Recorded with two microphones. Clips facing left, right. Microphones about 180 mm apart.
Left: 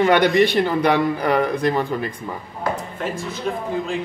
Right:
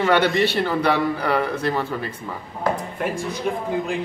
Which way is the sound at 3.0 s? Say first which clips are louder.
Right 1 dB; 15° right (ahead or behind).